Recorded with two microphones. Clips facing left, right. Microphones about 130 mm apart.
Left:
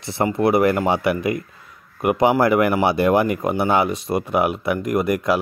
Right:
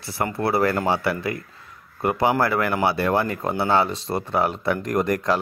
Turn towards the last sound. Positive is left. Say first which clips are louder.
# left 2 dB
turn(degrees=10)  # may be behind; listen again after turning